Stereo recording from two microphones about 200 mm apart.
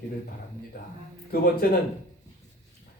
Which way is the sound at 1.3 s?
50° left (ahead or behind).